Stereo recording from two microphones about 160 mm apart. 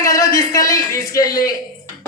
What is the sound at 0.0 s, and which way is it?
A man's voice, 20° left (ahead or behind).